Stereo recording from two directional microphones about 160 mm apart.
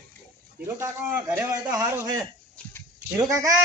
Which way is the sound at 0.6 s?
15° right (ahead or behind).